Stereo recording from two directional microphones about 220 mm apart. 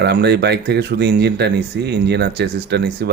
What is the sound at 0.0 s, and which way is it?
Speech, 50° right (ahead or behind).